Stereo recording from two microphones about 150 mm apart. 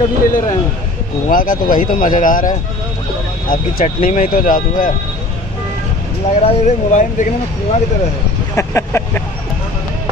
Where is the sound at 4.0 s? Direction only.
70° left (ahead or behind).